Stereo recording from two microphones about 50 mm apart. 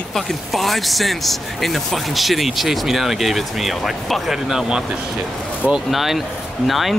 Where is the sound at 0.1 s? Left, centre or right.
Centre.